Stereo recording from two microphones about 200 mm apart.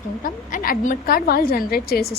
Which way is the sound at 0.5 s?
45° left (ahead or behind).